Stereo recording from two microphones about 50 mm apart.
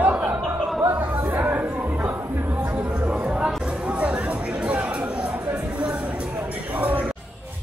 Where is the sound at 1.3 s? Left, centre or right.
Right.